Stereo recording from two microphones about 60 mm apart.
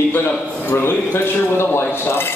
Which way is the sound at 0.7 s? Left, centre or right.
Left.